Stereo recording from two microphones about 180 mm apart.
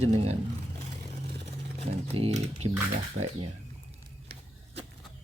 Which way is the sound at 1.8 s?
35° right (ahead or behind).